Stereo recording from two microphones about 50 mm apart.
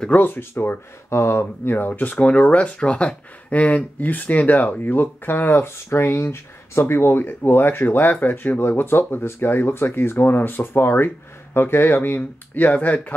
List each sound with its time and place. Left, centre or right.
0.1 s speech: left
1.1 s speech: left
6.8 s speech: left